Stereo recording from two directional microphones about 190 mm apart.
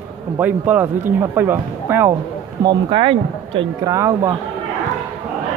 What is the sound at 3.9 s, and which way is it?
Speech, 15° right (ahead or behind).